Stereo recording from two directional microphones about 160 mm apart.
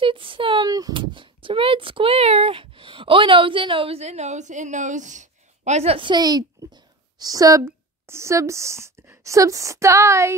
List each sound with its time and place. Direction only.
0.0 s speech: 35° right (ahead or behind)